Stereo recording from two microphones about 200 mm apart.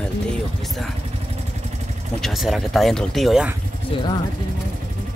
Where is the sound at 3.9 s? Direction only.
25° left (ahead or behind).